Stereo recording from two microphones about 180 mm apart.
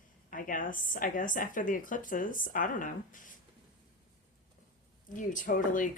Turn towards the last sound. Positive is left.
turn(degrees=45)  # may be behind; listen again after turning